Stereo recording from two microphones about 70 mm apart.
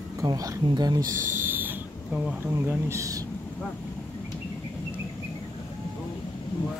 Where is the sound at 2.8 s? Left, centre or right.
Right.